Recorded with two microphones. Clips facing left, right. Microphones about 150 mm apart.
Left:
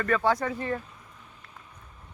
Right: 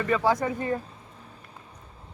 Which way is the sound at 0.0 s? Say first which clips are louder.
Right 1 dB; 10° right (ahead or behind).